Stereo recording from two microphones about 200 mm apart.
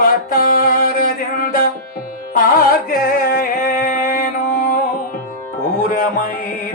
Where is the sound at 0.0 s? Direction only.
45° left (ahead or behind).